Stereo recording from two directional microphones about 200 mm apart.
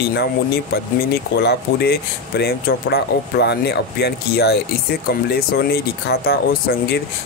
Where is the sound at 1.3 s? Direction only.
55° left (ahead or behind).